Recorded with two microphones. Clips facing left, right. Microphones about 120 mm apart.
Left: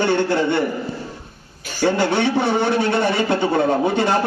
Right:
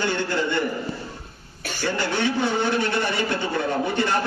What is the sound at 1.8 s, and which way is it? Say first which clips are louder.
A man's voice: left 7 dB; 60° left (ahead or behind).